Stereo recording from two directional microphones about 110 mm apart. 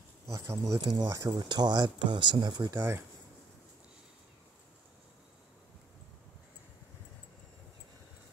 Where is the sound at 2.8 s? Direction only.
25° right (ahead or behind).